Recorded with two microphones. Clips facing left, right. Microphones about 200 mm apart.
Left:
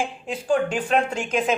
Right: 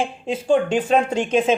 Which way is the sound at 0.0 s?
25° right (ahead or behind).